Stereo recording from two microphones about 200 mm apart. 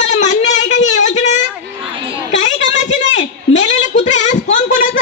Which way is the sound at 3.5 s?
35° left (ahead or behind).